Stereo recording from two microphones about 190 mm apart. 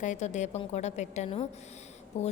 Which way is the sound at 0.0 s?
40° left (ahead or behind).